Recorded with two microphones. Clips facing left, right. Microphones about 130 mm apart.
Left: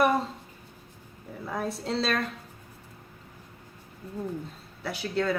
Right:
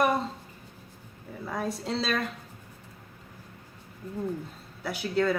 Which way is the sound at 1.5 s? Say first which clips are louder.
Even; centre (ahead or behind).